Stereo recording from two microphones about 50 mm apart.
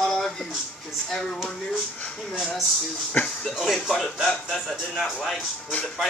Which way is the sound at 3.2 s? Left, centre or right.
Centre.